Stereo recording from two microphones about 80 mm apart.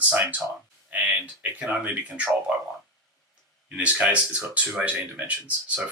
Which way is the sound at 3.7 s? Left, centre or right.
Centre.